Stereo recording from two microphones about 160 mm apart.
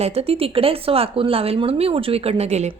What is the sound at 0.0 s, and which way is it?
Speech, 40° right (ahead or behind).